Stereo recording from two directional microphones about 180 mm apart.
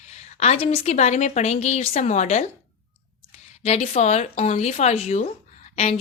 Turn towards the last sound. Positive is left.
turn(degrees=35)  # may be behind; listen again after turning